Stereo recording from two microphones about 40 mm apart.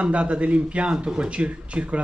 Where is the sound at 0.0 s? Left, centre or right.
Right.